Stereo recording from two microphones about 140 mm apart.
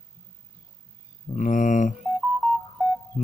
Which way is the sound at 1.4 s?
60° left (ahead or behind).